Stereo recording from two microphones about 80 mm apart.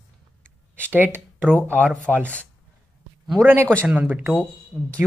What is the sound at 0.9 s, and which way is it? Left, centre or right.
Speech, right.